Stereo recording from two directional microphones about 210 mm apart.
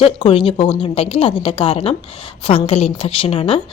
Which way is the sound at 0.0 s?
25° left (ahead or behind).